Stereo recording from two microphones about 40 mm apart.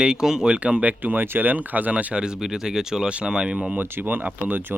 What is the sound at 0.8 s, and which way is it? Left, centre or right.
Speech, right.